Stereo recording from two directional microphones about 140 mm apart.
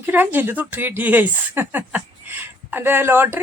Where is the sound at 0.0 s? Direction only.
10° right (ahead or behind).